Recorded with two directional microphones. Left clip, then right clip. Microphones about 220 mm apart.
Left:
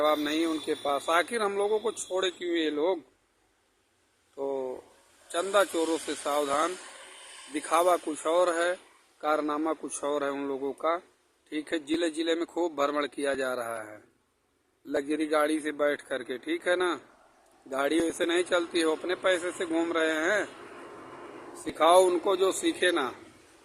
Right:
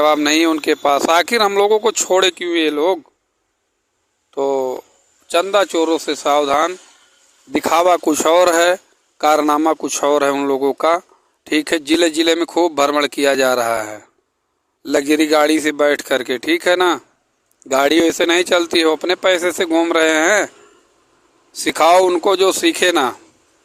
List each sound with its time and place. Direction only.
0.0 s speech: 45° right (ahead or behind)
4.4 s speech: 40° right (ahead or behind)
21.6 s speech: 40° right (ahead or behind)